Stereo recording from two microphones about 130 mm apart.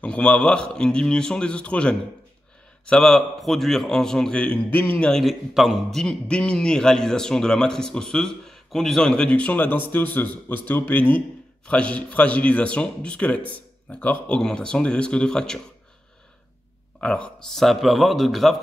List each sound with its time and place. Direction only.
0.0 s a man's voice: 10° left (ahead or behind)
17.0 s speech: 5° left (ahead or behind)